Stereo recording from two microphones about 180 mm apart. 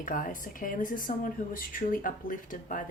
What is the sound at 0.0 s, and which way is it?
Speech, 50° left (ahead or behind).